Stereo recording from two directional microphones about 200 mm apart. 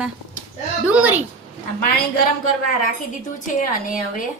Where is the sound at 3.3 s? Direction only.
45° left (ahead or behind).